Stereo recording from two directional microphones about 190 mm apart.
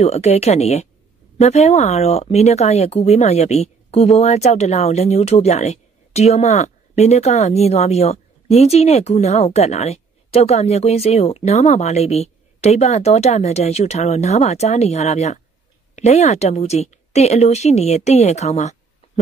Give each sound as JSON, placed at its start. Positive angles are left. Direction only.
{"t": 0.0, "sound": "speech", "side_deg": 35}